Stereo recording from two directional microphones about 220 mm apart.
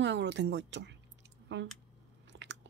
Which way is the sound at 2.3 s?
55° right (ahead or behind).